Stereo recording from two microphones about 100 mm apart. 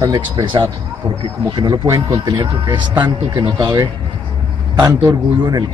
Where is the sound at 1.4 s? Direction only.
45° right (ahead or behind).